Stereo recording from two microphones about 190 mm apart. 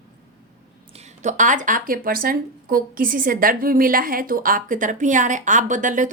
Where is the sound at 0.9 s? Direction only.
35° right (ahead or behind).